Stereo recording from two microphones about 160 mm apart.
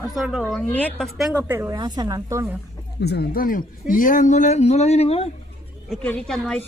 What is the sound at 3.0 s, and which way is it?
A man's voice, 90° left.